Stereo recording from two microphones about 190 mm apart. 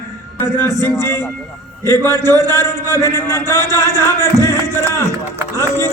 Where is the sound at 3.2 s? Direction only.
15° left (ahead or behind).